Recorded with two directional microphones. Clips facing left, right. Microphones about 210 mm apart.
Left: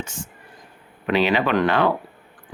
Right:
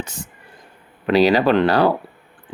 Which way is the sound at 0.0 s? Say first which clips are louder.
Right 2 dB; 35° right (ahead or behind).